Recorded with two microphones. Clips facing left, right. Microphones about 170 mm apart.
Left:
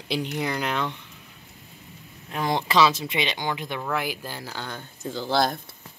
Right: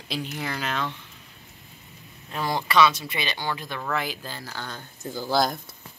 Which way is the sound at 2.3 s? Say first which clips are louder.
Left 2 dB; 20° left (ahead or behind).